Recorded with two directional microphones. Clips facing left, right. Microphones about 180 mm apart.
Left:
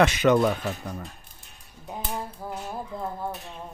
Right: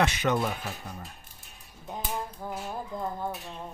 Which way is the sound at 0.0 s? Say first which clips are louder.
Left 7 dB; 90° left.